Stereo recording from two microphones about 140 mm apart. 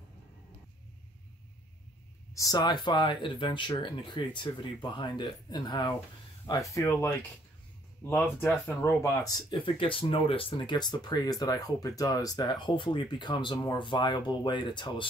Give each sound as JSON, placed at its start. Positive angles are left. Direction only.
{"t": 2.3, "sound": "speech", "side_deg": 25}
{"t": 6.7, "sound": "speech", "side_deg": 20}
{"t": 8.1, "sound": "speech", "side_deg": 15}
{"t": 9.5, "sound": "speech", "side_deg": 35}